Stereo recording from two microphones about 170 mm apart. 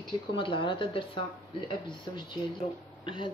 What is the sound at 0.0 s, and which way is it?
Speech, 30° left (ahead or behind).